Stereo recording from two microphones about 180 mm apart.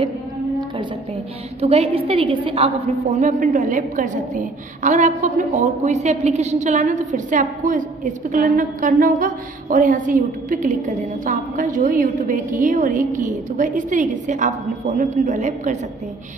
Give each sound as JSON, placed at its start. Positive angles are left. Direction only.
{"t": 1.6, "sound": "a woman's voice", "side_deg": -35}
{"t": 3.2, "sound": "a woman's voice", "side_deg": -45}